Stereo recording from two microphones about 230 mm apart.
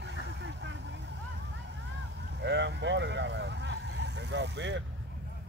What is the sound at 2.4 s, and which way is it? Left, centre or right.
Vehicle, right.